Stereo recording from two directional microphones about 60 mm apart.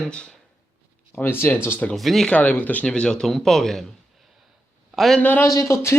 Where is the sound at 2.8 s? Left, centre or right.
Centre.